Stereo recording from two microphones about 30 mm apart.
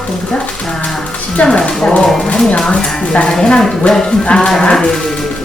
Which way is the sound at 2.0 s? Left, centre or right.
Centre.